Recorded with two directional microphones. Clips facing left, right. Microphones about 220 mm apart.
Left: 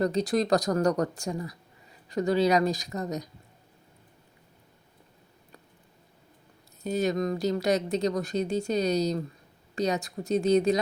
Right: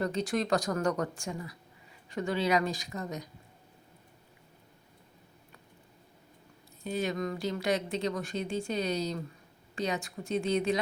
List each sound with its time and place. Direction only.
0.0 s speech: 40° left (ahead or behind)
6.8 s speech: 40° left (ahead or behind)